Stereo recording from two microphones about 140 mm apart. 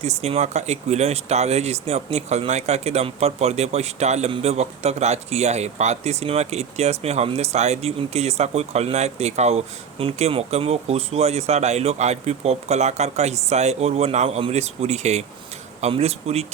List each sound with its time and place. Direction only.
0.0 s speech: 50° right (ahead or behind)